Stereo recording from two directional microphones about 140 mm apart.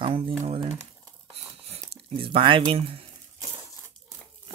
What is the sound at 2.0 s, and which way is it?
Speech, 40° right (ahead or behind).